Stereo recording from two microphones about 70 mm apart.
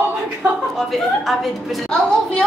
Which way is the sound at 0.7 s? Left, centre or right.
Centre.